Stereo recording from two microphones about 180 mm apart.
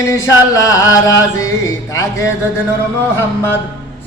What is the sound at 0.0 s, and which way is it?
Music, 15° left (ahead or behind).